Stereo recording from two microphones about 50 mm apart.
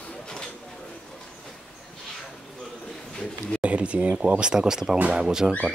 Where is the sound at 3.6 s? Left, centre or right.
Right.